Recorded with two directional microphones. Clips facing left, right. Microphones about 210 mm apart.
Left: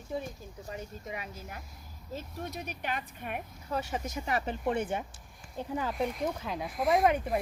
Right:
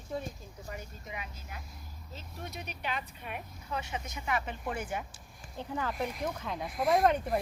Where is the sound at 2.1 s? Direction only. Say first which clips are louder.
Left 6 dB; 45° left (ahead or behind).